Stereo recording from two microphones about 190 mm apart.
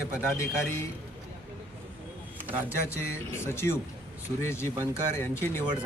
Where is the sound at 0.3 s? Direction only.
15° left (ahead or behind).